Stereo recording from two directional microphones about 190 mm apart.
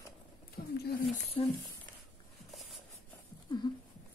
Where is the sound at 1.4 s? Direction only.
30° left (ahead or behind).